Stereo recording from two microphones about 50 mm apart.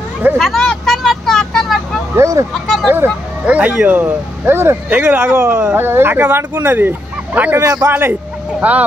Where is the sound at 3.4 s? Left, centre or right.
Right.